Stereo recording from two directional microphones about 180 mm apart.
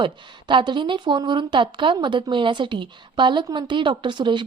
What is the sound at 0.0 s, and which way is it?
A woman's voice, 25° right (ahead or behind).